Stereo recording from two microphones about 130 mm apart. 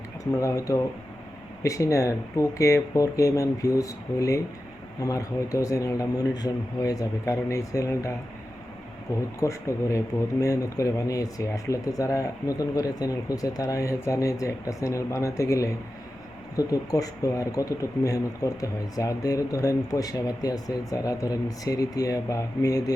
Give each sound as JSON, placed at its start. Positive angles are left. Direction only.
{"t": 0.3, "sound": "speech", "side_deg": 25}
{"t": 9.4, "sound": "speech", "side_deg": 25}